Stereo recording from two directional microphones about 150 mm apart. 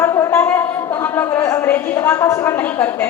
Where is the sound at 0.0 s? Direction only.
20° left (ahead or behind).